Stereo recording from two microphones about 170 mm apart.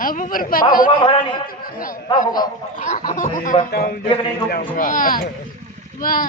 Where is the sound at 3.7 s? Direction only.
65° left (ahead or behind).